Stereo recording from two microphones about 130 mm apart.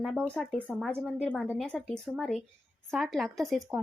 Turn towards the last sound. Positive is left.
turn(degrees=0)  # may be behind; listen again after turning